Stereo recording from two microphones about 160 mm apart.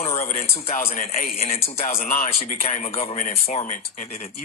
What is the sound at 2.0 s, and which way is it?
Speech, 60° left (ahead or behind).